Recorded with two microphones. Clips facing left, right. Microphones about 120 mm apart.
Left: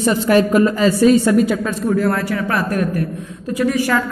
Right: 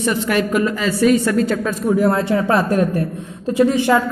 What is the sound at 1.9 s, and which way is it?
A woman's voice, 20° right (ahead or behind).